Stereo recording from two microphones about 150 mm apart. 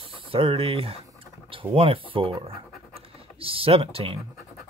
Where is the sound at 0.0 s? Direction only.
40° right (ahead or behind).